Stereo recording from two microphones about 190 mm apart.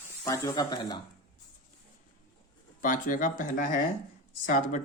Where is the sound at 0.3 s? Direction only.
15° left (ahead or behind).